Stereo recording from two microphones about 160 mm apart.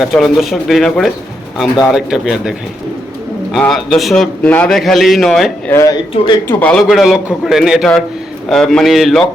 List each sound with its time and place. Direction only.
0.0 s a man's voice: centre (ahead or behind)
5.7 s a man's voice: 20° left (ahead or behind)
6.5 s a man's voice: 10° left (ahead or behind)